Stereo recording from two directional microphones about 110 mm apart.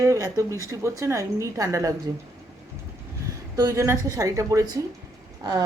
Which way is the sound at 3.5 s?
30° right (ahead or behind).